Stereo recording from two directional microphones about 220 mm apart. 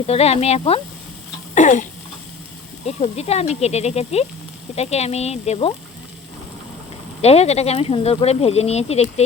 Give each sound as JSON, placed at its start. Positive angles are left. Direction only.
{"t": 0.1, "sound": "speech", "side_deg": 30}
{"t": 1.5, "sound": "throat clearing", "side_deg": 35}
{"t": 2.8, "sound": "speech", "side_deg": 30}
{"t": 7.2, "sound": "speech", "side_deg": 30}